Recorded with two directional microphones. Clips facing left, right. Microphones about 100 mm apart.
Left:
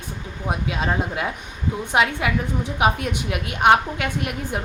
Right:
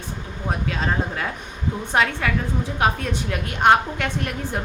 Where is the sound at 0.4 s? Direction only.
10° left (ahead or behind).